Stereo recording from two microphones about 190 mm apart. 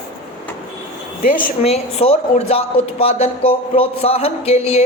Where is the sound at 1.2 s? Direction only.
50° left (ahead or behind).